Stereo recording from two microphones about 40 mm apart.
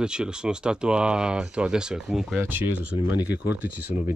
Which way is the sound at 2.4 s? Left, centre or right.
Right.